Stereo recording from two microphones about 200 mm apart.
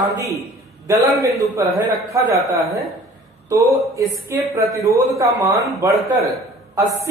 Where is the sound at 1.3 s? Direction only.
15° right (ahead or behind).